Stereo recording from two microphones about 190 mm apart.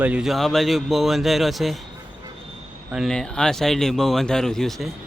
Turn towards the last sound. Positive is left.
turn(degrees=0)  # may be behind; listen again after turning